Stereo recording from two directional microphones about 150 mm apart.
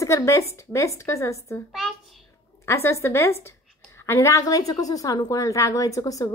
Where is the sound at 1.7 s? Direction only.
Centre (ahead or behind).